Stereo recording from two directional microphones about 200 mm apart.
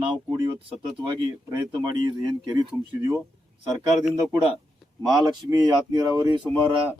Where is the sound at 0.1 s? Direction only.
20° right (ahead or behind).